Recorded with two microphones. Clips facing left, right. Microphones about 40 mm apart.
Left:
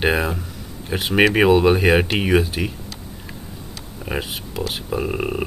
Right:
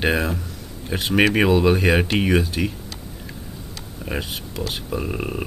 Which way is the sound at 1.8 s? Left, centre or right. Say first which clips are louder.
Left 2 dB; centre.